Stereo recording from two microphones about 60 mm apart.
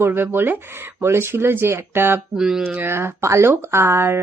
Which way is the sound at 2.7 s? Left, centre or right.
Right.